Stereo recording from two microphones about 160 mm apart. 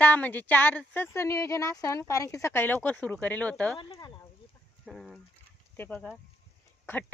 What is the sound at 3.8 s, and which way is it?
Speech, 30° left (ahead or behind).